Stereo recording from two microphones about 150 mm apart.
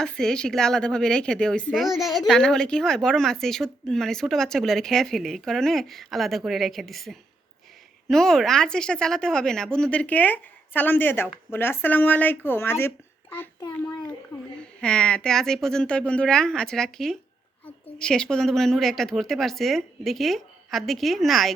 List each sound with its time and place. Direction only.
0.0 s a woman's voice: 5° left (ahead or behind)
14.3 s a sound: 35° left (ahead or behind)
14.8 s a woman's voice: 5° left (ahead or behind)